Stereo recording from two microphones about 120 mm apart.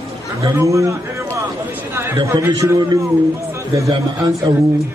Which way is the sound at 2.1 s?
25° right (ahead or behind).